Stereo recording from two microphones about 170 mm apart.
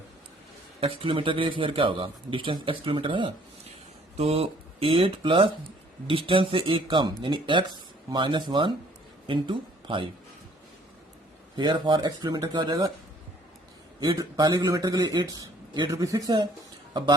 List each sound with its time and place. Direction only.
0.8 s a man's voice: 30° right (ahead or behind)
11.5 s speech: 25° right (ahead or behind)
14.0 s speech: 25° right (ahead or behind)